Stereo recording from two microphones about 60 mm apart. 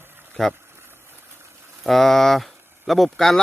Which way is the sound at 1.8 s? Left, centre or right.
Centre.